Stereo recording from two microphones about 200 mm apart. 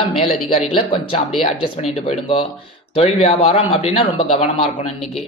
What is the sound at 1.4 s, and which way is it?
Speech, 35° left (ahead or behind).